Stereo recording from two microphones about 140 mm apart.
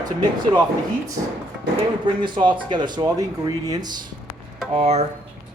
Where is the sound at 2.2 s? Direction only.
35° right (ahead or behind).